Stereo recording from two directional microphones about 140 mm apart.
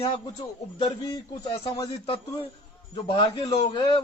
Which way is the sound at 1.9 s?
40° left (ahead or behind).